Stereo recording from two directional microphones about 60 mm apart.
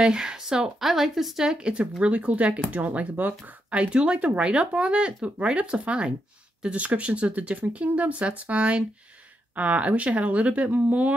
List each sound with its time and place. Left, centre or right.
0.0 s speech: centre; by 3.5 s right
3.7 s speech: centre